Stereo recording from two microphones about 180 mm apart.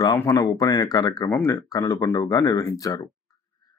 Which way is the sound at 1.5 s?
25° left (ahead or behind).